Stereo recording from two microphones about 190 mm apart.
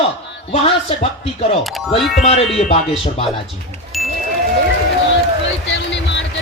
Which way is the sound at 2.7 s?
30° left (ahead or behind).